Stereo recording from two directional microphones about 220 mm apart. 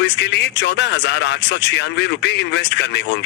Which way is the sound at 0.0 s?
50° left (ahead or behind).